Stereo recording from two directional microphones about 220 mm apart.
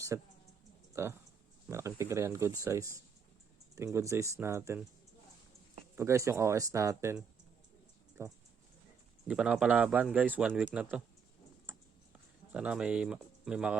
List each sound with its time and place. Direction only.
0.1 s speech: 10° right (ahead or behind)
3.9 s speech: 15° right (ahead or behind)
6.0 s a man's voice: 15° right (ahead or behind)
12.5 s speech: 5° right (ahead or behind)